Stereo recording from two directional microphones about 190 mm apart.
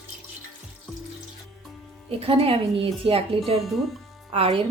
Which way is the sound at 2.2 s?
30° right (ahead or behind).